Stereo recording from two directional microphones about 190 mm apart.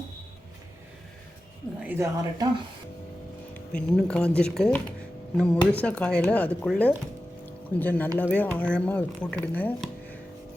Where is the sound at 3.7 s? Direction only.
5° left (ahead or behind).